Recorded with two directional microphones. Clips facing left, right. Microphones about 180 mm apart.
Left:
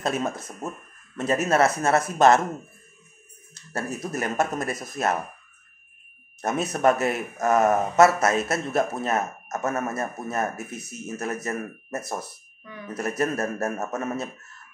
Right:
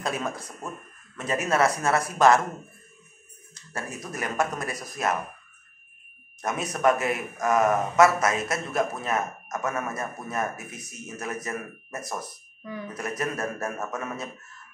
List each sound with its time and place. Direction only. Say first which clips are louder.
0.0 s a man's voice: left 3 dB; 25° left (ahead or behind)
3.7 s a man's voice: left 5 dB; 25° left (ahead or behind)
6.4 s a man's voice: left 2 dB; 30° left (ahead or behind)